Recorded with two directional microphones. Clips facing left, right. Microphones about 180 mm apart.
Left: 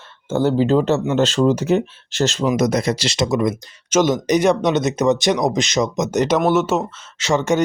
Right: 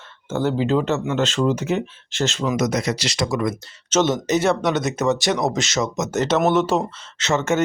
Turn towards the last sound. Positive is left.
turn(degrees=15)  # may be behind; listen again after turning